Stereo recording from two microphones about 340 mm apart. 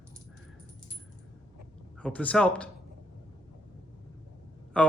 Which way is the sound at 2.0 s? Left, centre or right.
Centre.